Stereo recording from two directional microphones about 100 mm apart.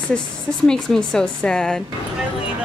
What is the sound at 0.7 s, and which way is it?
Speech, 5° left (ahead or behind).